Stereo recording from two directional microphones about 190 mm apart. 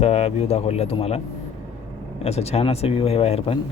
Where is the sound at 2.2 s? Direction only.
35° left (ahead or behind).